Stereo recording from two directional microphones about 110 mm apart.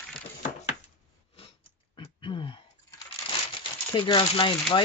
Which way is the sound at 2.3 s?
55° left (ahead or behind).